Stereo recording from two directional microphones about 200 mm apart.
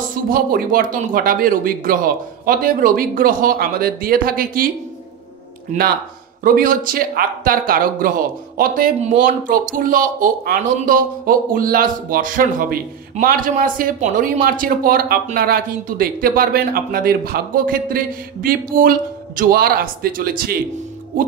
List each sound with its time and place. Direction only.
0.3 s speech: 45° right (ahead or behind)
5.7 s speech: 35° right (ahead or behind)